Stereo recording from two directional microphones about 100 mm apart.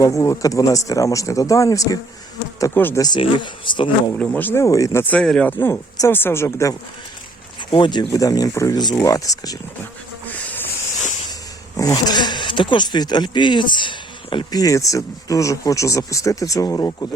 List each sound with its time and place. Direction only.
0.0 s speech: 30° left (ahead or behind)
2.7 s speech: 20° left (ahead or behind)
3.2 s speech: 55° left (ahead or behind)
4.1 s speech: 10° left (ahead or behind)
4.6 s speech: 30° left (ahead or behind)
5.0 s speech: 10° left (ahead or behind)
5.5 s speech: 20° left (ahead or behind)
7.7 s speech: 50° left (ahead or behind)
11.8 s speech: 40° left (ahead or behind); by 14.4 s 55° left (ahead or behind)
14.5 s speech: 35° left (ahead or behind)